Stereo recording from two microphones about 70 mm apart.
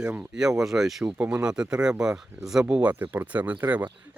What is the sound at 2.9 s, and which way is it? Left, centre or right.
Speech, right.